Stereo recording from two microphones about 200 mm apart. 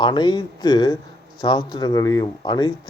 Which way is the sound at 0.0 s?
20° left (ahead or behind).